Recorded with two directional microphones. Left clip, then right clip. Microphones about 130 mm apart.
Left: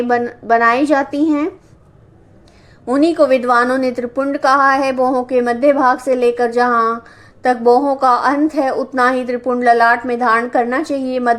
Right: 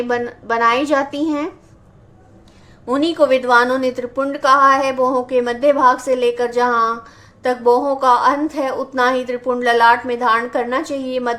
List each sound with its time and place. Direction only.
0.2 s a woman's voice: 25° left (ahead or behind)
2.8 s a woman's voice: 30° left (ahead or behind)